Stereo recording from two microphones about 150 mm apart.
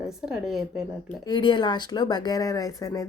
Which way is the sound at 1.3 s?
30° left (ahead or behind).